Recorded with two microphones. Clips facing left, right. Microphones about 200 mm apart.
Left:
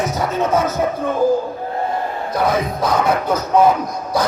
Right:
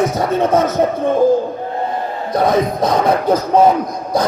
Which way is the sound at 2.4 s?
30° right (ahead or behind).